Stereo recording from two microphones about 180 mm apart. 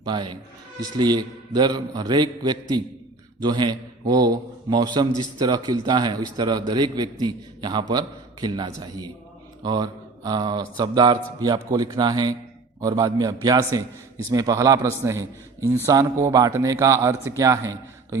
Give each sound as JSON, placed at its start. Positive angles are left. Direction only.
{"t": 0.0, "sound": "a man's voice", "side_deg": -25}